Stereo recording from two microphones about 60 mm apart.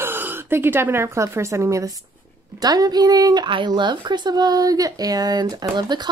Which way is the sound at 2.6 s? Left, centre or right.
Right.